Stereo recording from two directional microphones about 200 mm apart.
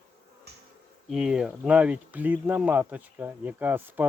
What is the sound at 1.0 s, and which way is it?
Speech, centre (ahead or behind).